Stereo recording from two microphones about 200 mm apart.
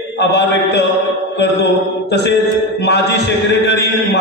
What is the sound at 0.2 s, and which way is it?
A man's voice, 55° left (ahead or behind).